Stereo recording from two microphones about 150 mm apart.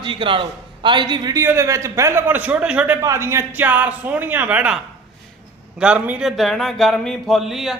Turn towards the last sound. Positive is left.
turn(degrees=0)  # may be behind; listen again after turning